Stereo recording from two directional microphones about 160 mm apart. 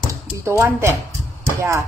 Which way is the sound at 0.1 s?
15° right (ahead or behind).